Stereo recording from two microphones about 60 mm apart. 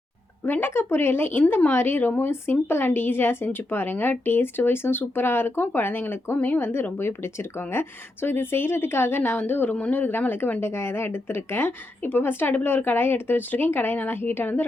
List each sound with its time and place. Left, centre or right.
0.4 s speech: left
9.7 s speech: left
10.0 s speech: left